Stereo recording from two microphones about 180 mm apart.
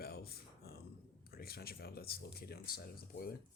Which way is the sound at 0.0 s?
60° left (ahead or behind).